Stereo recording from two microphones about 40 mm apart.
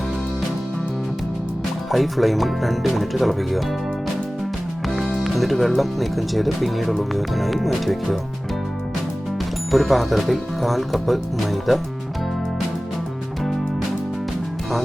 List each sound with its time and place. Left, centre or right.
1.9 s speech: centre
4.9 s music: centre
5.2 s speech: centre
9.7 s speech: centre